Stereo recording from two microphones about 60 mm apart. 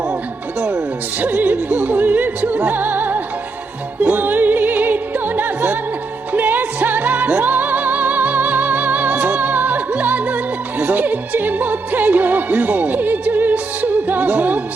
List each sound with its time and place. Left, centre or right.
1.2 s music: right